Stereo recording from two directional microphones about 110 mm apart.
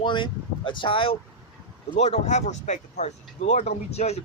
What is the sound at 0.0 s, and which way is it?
Speech, 45° left (ahead or behind).